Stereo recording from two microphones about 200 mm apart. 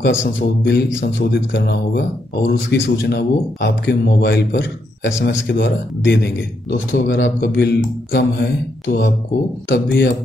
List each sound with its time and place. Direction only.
0.0 s speech: 60° left (ahead or behind)
7.2 s speech: 65° left (ahead or behind)